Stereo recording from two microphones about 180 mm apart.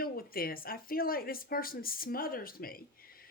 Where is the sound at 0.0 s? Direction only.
55° left (ahead or behind).